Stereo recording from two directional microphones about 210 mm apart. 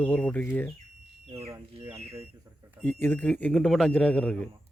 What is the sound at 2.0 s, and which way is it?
Speech, 30° right (ahead or behind).